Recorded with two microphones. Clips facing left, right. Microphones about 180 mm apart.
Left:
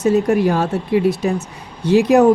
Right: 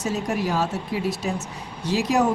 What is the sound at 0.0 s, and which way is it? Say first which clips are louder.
Speech: left 11 dB; 55° left (ahead or behind).